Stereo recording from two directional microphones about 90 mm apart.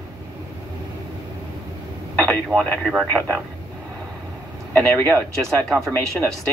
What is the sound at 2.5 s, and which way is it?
Speech, 5° right (ahead or behind).